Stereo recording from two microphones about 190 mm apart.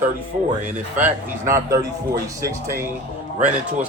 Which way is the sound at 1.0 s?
15° right (ahead or behind).